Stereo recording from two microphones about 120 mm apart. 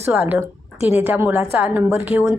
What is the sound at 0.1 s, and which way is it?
A woman's voice, 5° right (ahead or behind).